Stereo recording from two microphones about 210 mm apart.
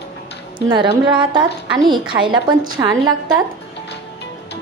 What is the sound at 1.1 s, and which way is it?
A woman's voice, 20° right (ahead or behind).